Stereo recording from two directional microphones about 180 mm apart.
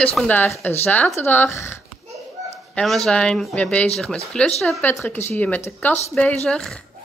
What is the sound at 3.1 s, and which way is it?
Speech, 5° left (ahead or behind).